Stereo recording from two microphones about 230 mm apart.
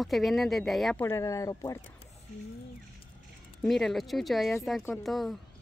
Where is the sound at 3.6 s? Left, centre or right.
Centre.